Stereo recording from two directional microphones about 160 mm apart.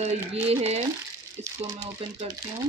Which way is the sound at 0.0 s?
40° right (ahead or behind).